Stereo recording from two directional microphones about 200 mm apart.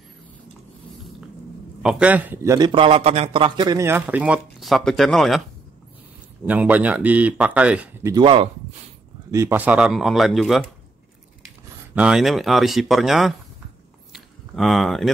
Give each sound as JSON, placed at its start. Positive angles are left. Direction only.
{"t": 1.8, "sound": "a man's voice", "side_deg": -5}
{"t": 6.4, "sound": "a man's voice", "side_deg": -10}
{"t": 8.1, "sound": "speech", "side_deg": -25}
{"t": 9.3, "sound": "speech", "side_deg": -15}
{"t": 11.9, "sound": "speech", "side_deg": -5}
{"t": 14.1, "sound": "a sound", "side_deg": 0}